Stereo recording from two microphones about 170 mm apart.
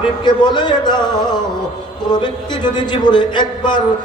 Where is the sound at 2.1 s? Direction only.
25° left (ahead or behind).